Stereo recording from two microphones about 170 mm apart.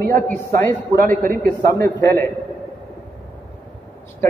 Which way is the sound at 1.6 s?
15° left (ahead or behind).